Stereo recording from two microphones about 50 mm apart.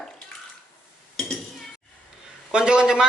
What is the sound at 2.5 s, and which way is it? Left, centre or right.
Speech, centre.